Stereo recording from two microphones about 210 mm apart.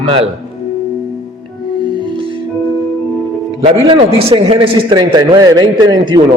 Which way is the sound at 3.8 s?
25° right (ahead or behind).